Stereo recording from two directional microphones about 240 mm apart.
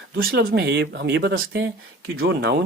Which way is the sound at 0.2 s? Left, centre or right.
Right.